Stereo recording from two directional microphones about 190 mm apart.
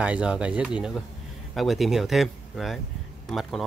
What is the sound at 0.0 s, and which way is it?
Speech, 5° right (ahead or behind).